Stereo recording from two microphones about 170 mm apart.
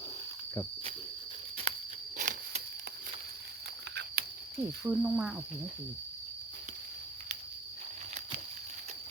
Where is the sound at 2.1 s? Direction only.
45° right (ahead or behind).